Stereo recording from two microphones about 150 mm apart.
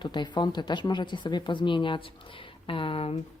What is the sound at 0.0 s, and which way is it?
Speech, 30° left (ahead or behind).